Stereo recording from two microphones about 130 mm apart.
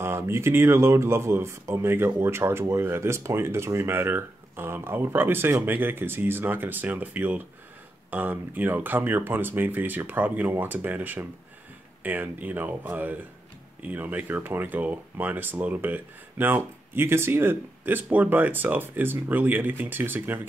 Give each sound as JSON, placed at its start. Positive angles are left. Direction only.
{"t": 0.0, "sound": "speech", "side_deg": -20}